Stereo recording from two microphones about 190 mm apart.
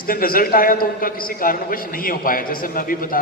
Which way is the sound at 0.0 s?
50° left (ahead or behind).